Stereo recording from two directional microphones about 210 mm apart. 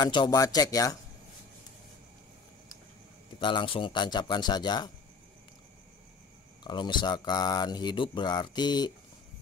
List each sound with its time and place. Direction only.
0.0 s speech: 20° left (ahead or behind)
3.3 s speech: 20° left (ahead or behind)
6.6 s speech: 20° left (ahead or behind)